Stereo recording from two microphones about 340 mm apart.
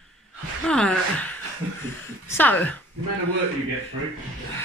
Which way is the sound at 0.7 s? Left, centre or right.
Centre.